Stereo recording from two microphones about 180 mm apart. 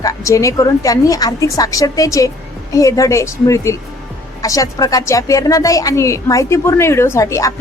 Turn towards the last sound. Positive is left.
turn(degrees=15)  # may be behind; listen again after turning